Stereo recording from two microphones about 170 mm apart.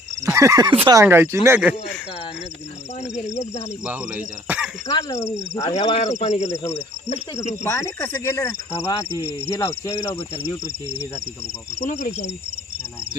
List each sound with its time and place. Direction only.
0.2 s speech: 20° right (ahead or behind)
0.9 s speech: 15° right (ahead or behind)
3.8 s speech: 10° right (ahead or behind)
4.9 s speech: 20° left (ahead or behind)
5.7 s speech: 35° left (ahead or behind)
7.6 s speech: 15° left (ahead or behind)
11.9 s speech: 50° left (ahead or behind)